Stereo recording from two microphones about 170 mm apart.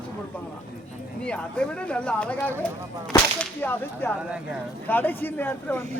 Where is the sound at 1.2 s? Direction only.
5° left (ahead or behind).